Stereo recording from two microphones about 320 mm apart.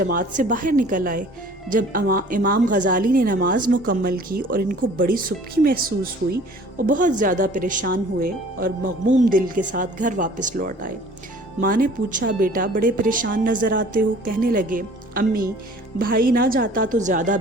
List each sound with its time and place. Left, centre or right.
0.0 s speech: right